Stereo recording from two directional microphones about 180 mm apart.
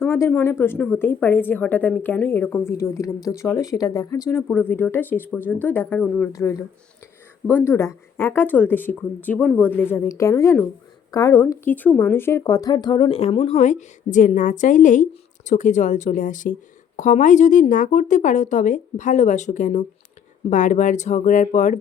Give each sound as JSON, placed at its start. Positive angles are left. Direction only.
{"t": 0.0, "sound": "a woman's voice", "side_deg": 10}